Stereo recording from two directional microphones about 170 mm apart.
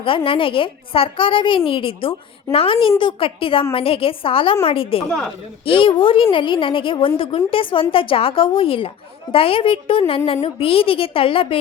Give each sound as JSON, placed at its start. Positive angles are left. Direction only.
{"t": 0.3, "sound": "a woman's voice", "side_deg": 30}